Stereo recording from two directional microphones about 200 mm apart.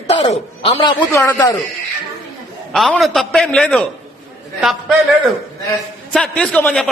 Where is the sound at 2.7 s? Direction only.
Centre (ahead or behind).